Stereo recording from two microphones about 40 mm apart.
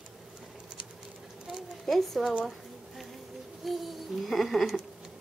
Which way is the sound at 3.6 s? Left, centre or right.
Centre.